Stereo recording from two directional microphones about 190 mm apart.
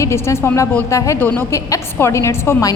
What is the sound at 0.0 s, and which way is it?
A woman's voice, 15° left (ahead or behind).